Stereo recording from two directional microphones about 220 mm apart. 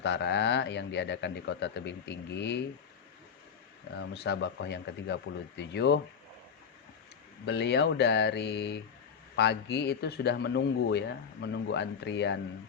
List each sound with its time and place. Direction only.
0.0 s a man's voice: 50° left (ahead or behind)
4.1 s a man's voice: 50° left (ahead or behind)
7.4 s a man's voice: 50° left (ahead or behind)